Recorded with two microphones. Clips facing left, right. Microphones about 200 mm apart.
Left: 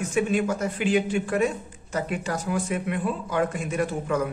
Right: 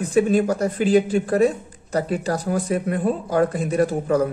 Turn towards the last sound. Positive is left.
turn(degrees=-35)  # may be behind; listen again after turning